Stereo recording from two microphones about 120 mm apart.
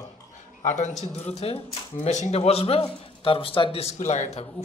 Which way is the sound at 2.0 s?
70° left (ahead or behind).